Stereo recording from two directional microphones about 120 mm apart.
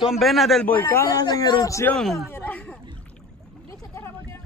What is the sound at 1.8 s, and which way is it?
Speech, 5° left (ahead or behind).